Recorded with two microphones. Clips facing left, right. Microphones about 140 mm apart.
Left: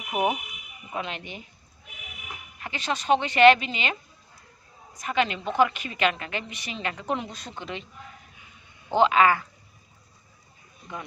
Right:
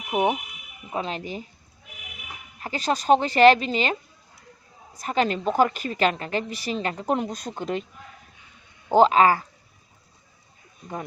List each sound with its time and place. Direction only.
0.1 s speech: 25° right (ahead or behind)
0.9 s a woman's voice: 35° right (ahead or behind)
2.6 s a woman's voice: 40° right (ahead or behind)
4.9 s a woman's voice: 35° right (ahead or behind)
8.9 s a woman's voice: 40° right (ahead or behind)